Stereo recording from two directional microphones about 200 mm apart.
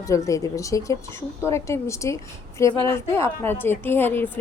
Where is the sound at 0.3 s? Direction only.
15° left (ahead or behind).